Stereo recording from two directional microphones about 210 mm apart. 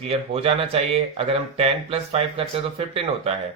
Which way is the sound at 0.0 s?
30° right (ahead or behind).